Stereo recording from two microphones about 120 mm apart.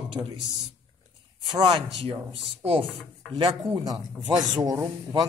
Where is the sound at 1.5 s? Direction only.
40° right (ahead or behind).